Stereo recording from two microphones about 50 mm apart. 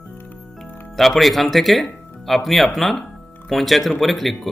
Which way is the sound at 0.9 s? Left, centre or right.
Centre.